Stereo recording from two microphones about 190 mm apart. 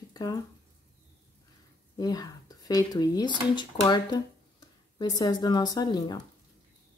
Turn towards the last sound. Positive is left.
turn(degrees=20)  # may be behind; listen again after turning